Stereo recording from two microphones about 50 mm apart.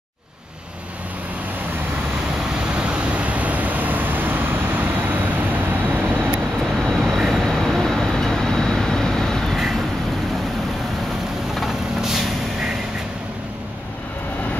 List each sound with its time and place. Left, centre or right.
2.7 s vehicle: right
6.8 s vehicle: centre
11.6 s vehicle: centre